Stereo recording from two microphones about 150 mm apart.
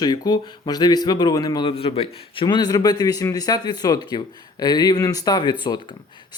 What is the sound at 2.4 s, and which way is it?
Speech, 25° left (ahead or behind).